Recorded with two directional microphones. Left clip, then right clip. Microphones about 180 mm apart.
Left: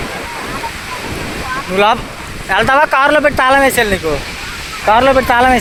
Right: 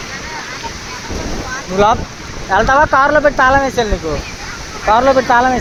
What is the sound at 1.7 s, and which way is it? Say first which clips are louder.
Speech: even; 25° left (ahead or behind).